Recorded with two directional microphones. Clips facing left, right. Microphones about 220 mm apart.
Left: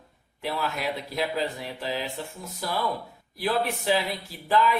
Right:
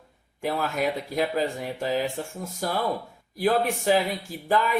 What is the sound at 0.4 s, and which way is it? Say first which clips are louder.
Speech: right 4 dB; 50° right (ahead or behind).